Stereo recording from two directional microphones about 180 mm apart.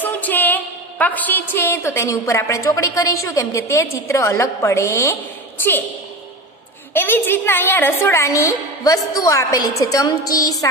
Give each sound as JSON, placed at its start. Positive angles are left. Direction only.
{"t": 0.0, "sound": "a sound", "side_deg": 10}
{"t": 1.5, "sound": "a woman's voice", "side_deg": 15}
{"t": 6.9, "sound": "a woman's voice", "side_deg": 10}